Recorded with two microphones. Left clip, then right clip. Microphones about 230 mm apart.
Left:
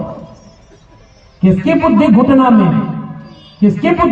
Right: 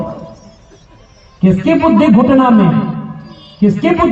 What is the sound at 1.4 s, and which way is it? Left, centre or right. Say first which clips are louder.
A man's voice: right 1 dB; right.